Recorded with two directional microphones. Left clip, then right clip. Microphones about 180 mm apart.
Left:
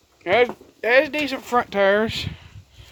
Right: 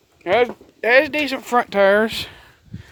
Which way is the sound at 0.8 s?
50° right (ahead or behind).